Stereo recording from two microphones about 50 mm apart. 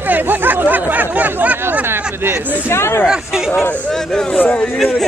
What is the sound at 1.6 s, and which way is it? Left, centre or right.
Chatter, right.